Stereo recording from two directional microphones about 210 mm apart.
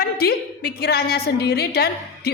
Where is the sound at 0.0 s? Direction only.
45° left (ahead or behind).